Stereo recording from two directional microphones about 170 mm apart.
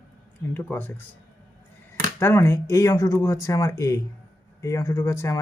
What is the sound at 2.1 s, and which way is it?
Speech, 15° left (ahead or behind).